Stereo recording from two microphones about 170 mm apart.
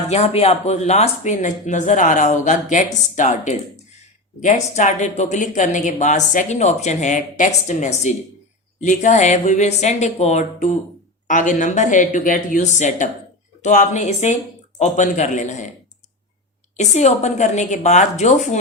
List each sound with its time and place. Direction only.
0.1 s speech: 40° left (ahead or behind)
16.7 s speech: 40° left (ahead or behind)